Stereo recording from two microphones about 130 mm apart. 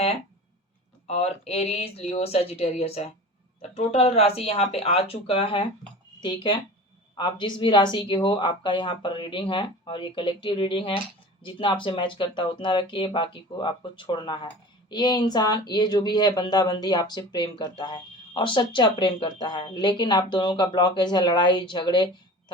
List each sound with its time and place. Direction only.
1.0 s speech: 55° left (ahead or behind); by 22.5 s 35° left (ahead or behind)